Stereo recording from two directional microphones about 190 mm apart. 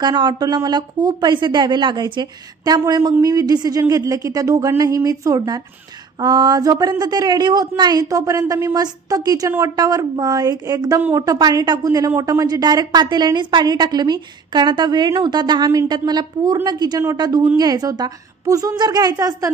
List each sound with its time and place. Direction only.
0.0 s a woman's voice: 25° right (ahead or behind)